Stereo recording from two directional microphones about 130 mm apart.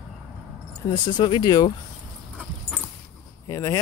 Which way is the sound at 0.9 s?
35° left (ahead or behind).